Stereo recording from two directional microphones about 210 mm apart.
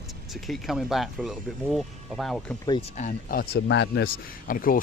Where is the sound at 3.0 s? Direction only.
40° left (ahead or behind).